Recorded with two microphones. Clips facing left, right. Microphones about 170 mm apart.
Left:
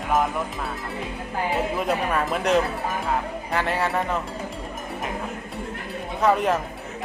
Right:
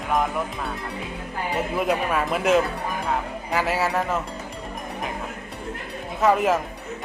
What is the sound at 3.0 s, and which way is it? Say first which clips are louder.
Music: even; centre (ahead or behind).